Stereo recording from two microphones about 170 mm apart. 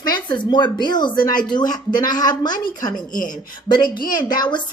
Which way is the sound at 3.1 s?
50° left (ahead or behind).